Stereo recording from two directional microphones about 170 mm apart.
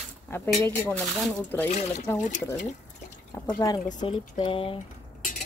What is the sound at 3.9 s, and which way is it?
Speech, 25° left (ahead or behind).